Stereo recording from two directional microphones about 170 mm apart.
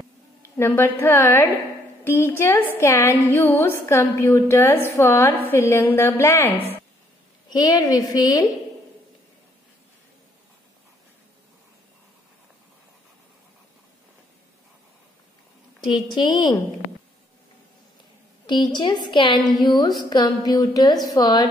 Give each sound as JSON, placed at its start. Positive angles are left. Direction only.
{"t": 0.6, "sound": "a woman's voice", "side_deg": 15}
{"t": 15.8, "sound": "a woman's voice", "side_deg": 25}
{"t": 18.5, "sound": "a woman's voice", "side_deg": 25}